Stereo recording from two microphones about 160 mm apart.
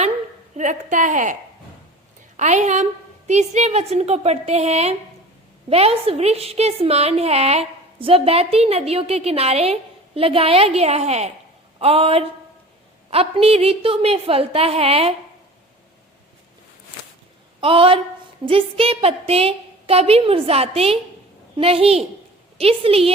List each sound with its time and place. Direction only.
0.5 s a woman's voice: 50° right (ahead or behind)
17.6 s a woman's voice: 35° right (ahead or behind)